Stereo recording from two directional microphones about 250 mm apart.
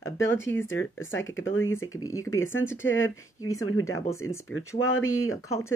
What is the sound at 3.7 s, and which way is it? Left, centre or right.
Speech, left.